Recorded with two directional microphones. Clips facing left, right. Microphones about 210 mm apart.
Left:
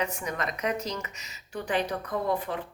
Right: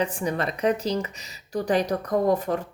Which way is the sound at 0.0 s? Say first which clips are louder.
Right 5 dB; 30° right (ahead or behind).